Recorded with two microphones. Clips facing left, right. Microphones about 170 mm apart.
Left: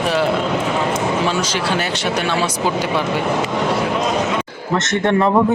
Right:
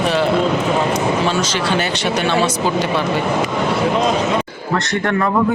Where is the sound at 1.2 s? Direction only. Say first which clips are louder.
Right 1 dB; 10° left (ahead or behind).